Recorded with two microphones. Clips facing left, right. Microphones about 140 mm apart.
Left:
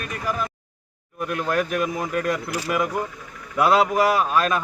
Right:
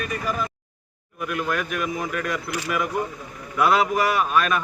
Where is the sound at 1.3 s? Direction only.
35° left (ahead or behind).